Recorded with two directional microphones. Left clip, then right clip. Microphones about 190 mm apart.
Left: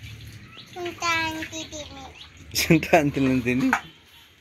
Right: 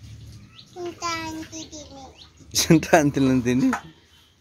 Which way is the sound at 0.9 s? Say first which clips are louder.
Left 5 dB; 5° right (ahead or behind).